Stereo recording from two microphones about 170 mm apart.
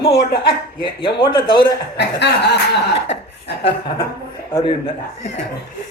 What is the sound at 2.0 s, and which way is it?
Speech, 85° left.